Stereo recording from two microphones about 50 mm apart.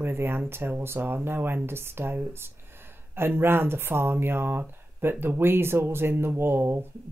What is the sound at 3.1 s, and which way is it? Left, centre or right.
Speech, right.